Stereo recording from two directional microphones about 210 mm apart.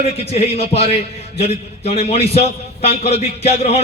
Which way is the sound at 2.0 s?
30° left (ahead or behind).